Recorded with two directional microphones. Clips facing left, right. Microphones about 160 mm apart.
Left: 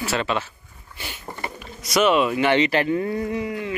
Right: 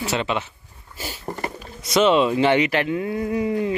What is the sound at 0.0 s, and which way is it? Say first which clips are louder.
Speech: even; 20° right (ahead or behind).